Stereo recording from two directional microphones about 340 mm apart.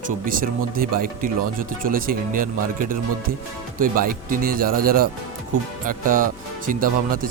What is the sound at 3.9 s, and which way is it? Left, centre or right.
Speech, right.